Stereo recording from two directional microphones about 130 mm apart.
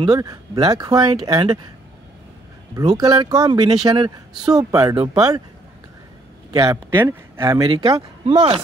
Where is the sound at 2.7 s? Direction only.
30° right (ahead or behind).